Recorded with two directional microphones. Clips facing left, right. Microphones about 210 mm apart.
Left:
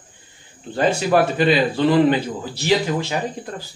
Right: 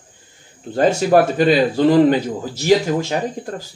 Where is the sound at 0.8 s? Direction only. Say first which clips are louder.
Right 3 dB; 45° right (ahead or behind).